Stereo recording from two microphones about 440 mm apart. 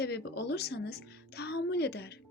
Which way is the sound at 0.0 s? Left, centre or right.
Left.